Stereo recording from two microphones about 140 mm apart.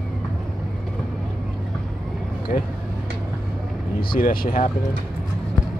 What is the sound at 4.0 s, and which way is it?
Speech, 90° left.